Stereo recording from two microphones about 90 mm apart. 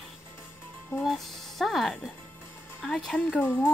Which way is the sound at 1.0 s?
Centre (ahead or behind).